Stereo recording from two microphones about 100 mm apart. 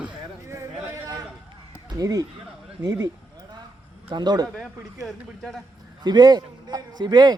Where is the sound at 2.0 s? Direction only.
35° right (ahead or behind).